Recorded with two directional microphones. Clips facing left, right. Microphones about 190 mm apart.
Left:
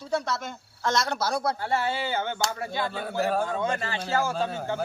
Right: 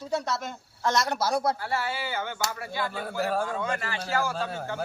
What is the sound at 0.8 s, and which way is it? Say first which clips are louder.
Speech: even; 15° right (ahead or behind).